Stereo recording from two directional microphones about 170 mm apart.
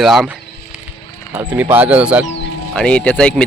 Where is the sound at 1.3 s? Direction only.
10° right (ahead or behind).